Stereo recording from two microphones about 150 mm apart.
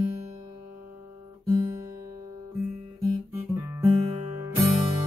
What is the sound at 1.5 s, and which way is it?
Guitar, 20° right (ahead or behind).